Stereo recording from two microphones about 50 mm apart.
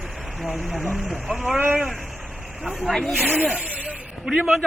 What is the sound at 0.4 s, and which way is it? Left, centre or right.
Speech, centre.